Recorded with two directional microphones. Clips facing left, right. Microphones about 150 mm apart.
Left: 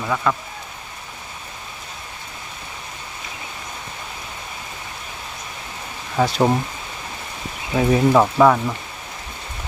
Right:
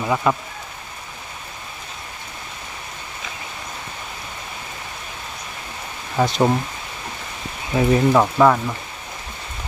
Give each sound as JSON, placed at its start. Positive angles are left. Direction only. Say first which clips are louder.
{"t": 0.0, "sound": "speech", "louder": "right 2 dB", "side_deg": -20}
{"t": 6.1, "sound": "speech", "louder": "even", "side_deg": 5}
{"t": 7.7, "sound": "speech", "louder": "even", "side_deg": 5}